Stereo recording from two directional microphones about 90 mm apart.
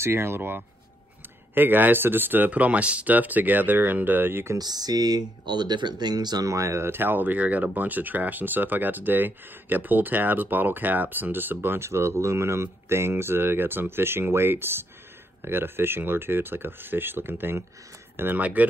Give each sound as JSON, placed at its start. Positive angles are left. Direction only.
{"t": 0.0, "sound": "speech", "side_deg": -25}
{"t": 4.6, "sound": "speech", "side_deg": -45}